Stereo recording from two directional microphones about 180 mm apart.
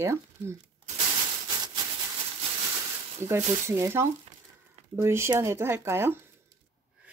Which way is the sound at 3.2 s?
15° right (ahead or behind).